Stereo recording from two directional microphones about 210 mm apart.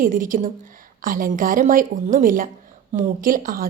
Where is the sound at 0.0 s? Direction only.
40° right (ahead or behind).